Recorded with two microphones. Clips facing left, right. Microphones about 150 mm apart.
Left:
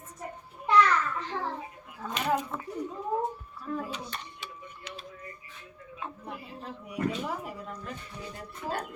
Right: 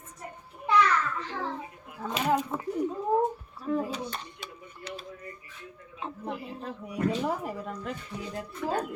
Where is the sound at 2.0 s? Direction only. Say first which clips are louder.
Right 2 dB; 25° right (ahead or behind).